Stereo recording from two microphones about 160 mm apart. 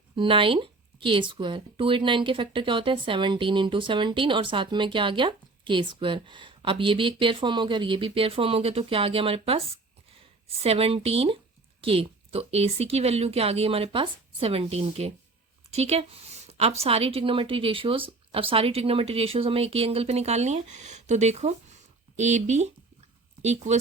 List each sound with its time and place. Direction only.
0.2 s speech: 30° right (ahead or behind)